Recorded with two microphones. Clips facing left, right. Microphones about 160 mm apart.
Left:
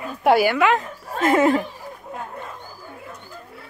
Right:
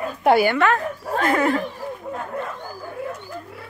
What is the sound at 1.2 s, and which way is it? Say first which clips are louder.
Speech: left 3 dB; 20° left (ahead or behind).